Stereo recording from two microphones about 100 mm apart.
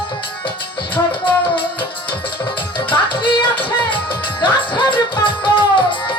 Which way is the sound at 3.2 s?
60° left (ahead or behind).